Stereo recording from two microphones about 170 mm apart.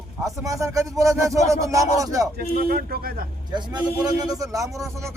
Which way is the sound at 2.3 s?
65° right (ahead or behind).